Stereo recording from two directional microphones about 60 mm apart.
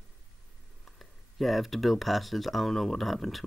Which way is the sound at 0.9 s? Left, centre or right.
Centre.